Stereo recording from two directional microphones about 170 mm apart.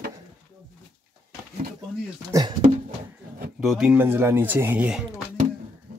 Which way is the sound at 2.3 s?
25° right (ahead or behind).